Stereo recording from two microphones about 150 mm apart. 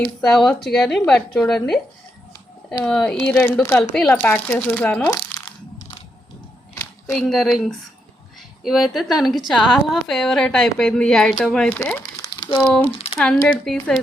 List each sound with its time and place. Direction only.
0.0 s a woman's voice: 5° left (ahead or behind)
5.0 s a sound: 20° left (ahead or behind)
7.1 s a woman's voice: centre (ahead or behind); by 12.5 s 20° left (ahead or behind)
13.1 s a woman's voice: 5° left (ahead or behind)